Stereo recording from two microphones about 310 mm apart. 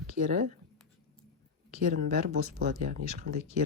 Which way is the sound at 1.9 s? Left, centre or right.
Right.